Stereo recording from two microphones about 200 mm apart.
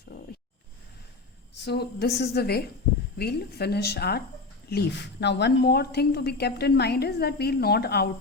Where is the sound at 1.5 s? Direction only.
55° left (ahead or behind).